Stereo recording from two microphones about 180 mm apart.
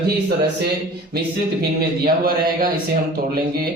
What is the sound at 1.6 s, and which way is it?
Speech, 55° right (ahead or behind).